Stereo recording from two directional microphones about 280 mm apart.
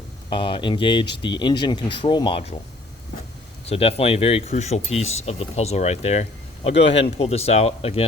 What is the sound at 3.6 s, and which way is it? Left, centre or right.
Speech, left.